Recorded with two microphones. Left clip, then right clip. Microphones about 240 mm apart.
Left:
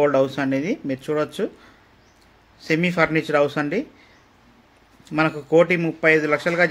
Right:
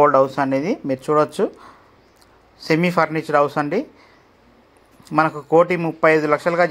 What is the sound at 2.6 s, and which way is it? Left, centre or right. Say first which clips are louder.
Speech: right 2 dB; centre.